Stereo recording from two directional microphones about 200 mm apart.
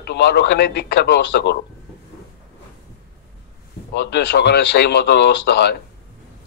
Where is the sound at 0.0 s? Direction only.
55° left (ahead or behind).